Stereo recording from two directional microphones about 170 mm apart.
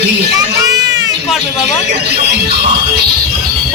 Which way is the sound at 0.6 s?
20° right (ahead or behind).